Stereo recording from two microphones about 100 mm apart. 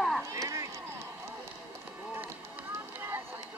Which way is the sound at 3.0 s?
25° right (ahead or behind).